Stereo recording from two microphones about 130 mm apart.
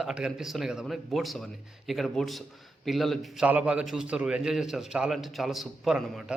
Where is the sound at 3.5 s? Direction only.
10° right (ahead or behind).